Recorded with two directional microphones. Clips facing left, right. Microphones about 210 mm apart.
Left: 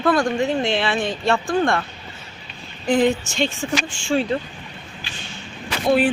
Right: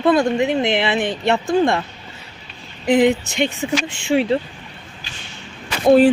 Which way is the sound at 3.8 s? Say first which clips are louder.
Right 3 dB; 65° right (ahead or behind).